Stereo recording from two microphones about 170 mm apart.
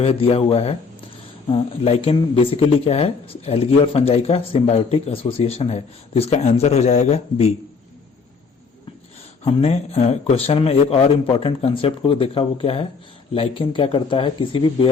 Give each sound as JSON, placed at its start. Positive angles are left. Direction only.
{"t": 0.0, "sound": "speech", "side_deg": 35}
{"t": 9.4, "sound": "speech", "side_deg": 35}